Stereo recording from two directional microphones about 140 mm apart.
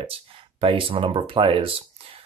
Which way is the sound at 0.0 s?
40° right (ahead or behind).